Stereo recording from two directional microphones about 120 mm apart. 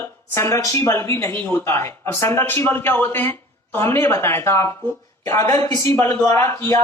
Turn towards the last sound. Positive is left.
turn(degrees=20)  # may be behind; listen again after turning